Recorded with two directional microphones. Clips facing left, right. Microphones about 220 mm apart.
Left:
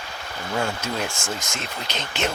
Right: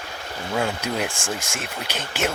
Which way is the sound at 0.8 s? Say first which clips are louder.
Right 2 dB; 15° right (ahead or behind).